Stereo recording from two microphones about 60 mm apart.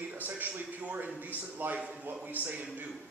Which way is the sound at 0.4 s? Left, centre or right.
Right.